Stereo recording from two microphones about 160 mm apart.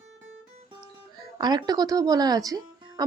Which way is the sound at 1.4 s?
25° right (ahead or behind).